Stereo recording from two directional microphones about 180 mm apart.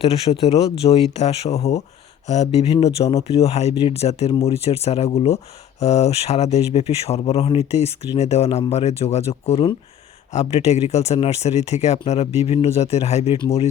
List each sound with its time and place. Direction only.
0.0 s speech: 35° left (ahead or behind)